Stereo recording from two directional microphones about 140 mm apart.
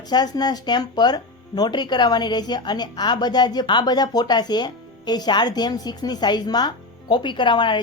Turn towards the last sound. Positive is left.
turn(degrees=35)  # may be behind; listen again after turning